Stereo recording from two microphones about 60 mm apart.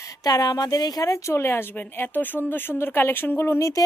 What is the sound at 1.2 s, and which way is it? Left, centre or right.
Speech, left.